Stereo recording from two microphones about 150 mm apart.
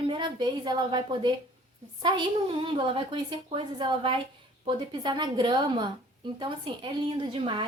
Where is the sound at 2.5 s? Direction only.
35° right (ahead or behind).